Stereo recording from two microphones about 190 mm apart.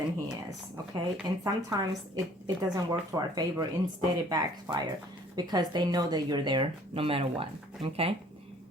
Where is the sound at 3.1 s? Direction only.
20° right (ahead or behind).